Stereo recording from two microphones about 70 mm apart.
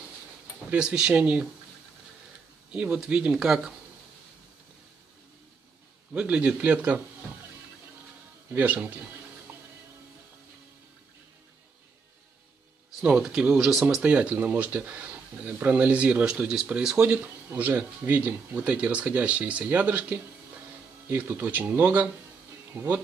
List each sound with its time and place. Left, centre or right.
0.7 s speech: centre
2.7 s speech: centre
3.3 s speech: centre
6.1 s speech: centre
8.5 s speech: right
13.3 s speech: centre